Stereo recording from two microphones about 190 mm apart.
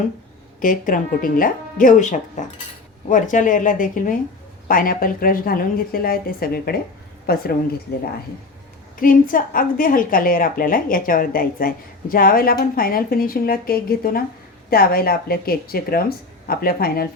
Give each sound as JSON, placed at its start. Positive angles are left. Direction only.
{"t": 0.6, "sound": "a woman's voice", "side_deg": 45}
{"t": 2.4, "sound": "cutlery", "side_deg": 40}
{"t": 3.1, "sound": "a woman's voice", "side_deg": 40}
{"t": 9.0, "sound": "a woman's voice", "side_deg": 45}